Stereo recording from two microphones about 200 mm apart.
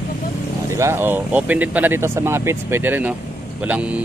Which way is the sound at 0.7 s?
15° right (ahead or behind).